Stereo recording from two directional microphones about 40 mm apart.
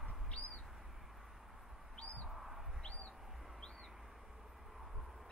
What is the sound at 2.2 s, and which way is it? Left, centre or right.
Bird, centre.